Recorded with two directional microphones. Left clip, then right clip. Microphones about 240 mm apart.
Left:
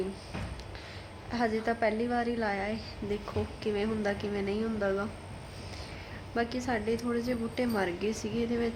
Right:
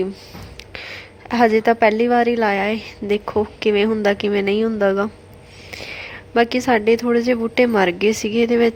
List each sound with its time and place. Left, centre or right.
0.7 s a woman's voice: right